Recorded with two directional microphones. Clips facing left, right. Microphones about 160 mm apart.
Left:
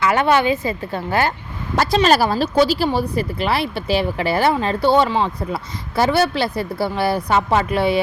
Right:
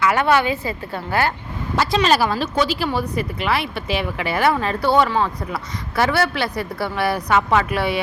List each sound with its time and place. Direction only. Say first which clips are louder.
0.0 s a woman's voice: left 1 dB; 25° left (ahead or behind)
1.7 s a woman's voice: left 2 dB; 40° left (ahead or behind)